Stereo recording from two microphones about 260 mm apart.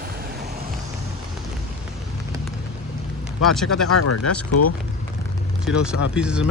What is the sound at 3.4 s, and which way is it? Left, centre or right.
Speech, centre.